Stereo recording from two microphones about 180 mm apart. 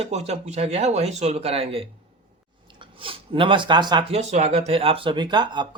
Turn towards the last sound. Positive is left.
turn(degrees=-25)  # may be behind; listen again after turning